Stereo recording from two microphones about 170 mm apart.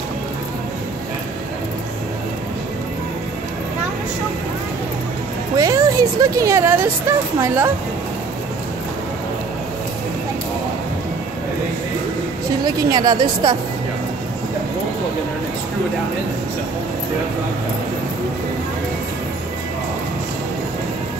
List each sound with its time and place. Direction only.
5.6 s speech: 20° right (ahead or behind)
12.6 s a woman's voice: 25° right (ahead or behind)